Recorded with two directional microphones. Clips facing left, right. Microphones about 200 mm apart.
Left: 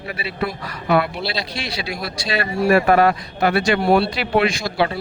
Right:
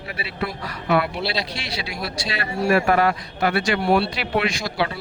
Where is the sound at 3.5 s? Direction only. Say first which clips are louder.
Left 3 dB; 30° left (ahead or behind).